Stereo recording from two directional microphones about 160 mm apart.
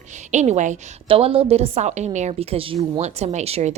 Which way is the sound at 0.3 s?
45° right (ahead or behind).